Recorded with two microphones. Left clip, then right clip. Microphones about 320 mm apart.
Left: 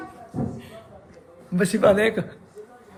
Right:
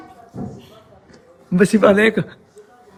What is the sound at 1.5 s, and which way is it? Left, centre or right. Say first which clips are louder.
Speech: right 5 dB; right.